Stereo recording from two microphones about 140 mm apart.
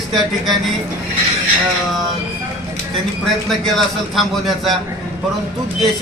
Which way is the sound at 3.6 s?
Centre (ahead or behind).